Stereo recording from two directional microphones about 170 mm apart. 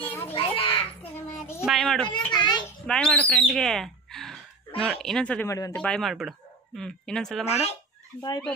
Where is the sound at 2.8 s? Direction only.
5° left (ahead or behind).